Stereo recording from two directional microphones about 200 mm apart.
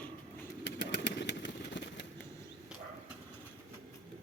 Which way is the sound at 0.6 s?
60° left (ahead or behind).